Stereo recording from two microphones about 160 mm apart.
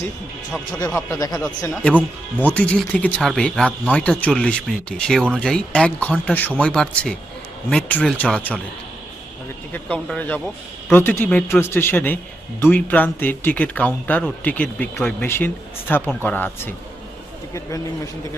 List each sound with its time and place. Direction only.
1.1 s speech: 25° left (ahead or behind)
1.7 s speech: 5° left (ahead or behind)
9.7 s speech: 10° left (ahead or behind)